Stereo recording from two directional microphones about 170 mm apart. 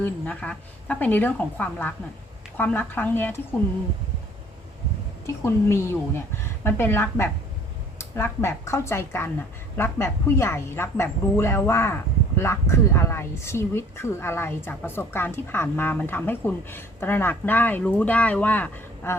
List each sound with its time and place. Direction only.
0.0 s speech: 5° left (ahead or behind)
5.2 s speech: 15° left (ahead or behind)